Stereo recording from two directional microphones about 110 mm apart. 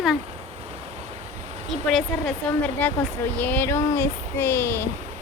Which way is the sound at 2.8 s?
15° left (ahead or behind).